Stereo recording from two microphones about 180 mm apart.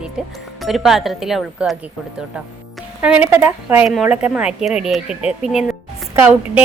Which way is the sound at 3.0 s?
10° right (ahead or behind).